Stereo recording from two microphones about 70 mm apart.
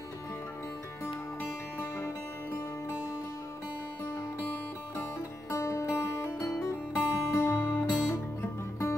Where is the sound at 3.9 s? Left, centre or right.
Left.